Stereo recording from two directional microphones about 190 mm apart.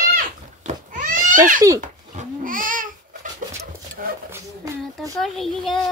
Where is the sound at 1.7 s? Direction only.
45° right (ahead or behind).